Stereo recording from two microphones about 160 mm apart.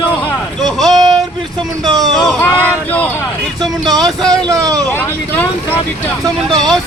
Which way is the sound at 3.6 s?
25° right (ahead or behind).